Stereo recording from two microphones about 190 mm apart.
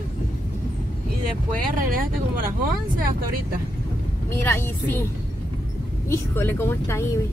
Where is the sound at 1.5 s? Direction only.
45° right (ahead or behind).